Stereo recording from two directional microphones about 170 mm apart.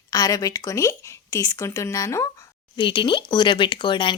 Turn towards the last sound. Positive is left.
turn(degrees=30)  # may be behind; listen again after turning